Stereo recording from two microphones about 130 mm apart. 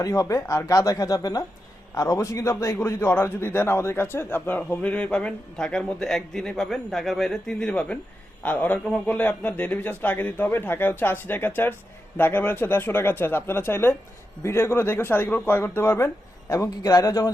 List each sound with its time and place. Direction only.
0.0 s speech: 25° left (ahead or behind)